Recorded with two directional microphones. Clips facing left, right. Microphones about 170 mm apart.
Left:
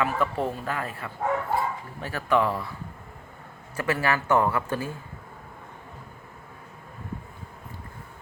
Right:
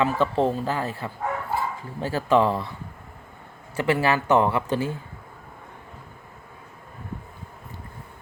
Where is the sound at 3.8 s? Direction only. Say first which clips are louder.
Right 4 dB; 25° right (ahead or behind).